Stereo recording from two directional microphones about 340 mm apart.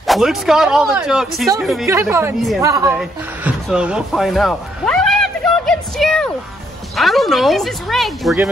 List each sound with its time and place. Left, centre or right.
0.0 s speech: centre